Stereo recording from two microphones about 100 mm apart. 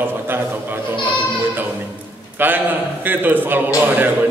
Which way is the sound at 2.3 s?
20° right (ahead or behind).